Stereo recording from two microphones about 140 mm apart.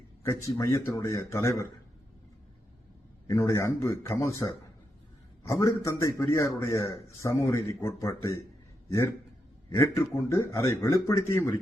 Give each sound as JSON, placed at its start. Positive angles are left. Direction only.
{"t": 0.2, "sound": "a man's voice", "side_deg": 20}
{"t": 3.2, "sound": "a man's voice", "side_deg": 20}
{"t": 9.6, "sound": "a man's voice", "side_deg": 20}